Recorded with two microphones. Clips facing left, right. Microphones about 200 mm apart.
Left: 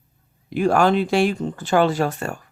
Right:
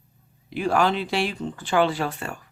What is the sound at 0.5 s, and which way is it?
Speech, 50° left (ahead or behind).